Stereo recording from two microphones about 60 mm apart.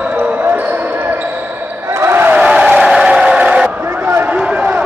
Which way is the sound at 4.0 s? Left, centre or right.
Right.